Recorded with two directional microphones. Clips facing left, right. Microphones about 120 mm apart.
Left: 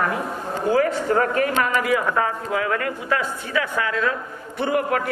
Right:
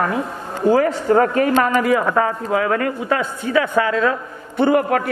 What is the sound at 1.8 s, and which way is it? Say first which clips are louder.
A man's voice: right 4 dB; 35° right (ahead or behind).